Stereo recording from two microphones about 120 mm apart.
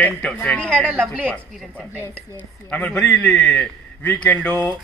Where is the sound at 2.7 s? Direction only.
5° left (ahead or behind).